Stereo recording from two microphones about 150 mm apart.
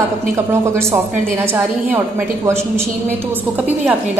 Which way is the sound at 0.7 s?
15° right (ahead or behind).